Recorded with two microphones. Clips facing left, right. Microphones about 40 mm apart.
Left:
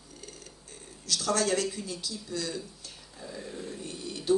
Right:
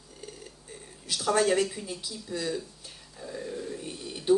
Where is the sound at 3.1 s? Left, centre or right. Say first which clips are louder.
Right 4 dB; centre.